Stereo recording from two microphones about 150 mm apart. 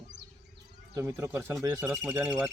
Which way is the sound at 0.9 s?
20° right (ahead or behind).